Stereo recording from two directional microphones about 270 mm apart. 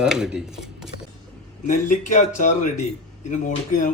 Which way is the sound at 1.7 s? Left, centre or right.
Left.